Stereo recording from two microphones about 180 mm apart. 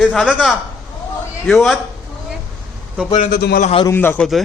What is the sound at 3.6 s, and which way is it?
Speech, 30° left (ahead or behind).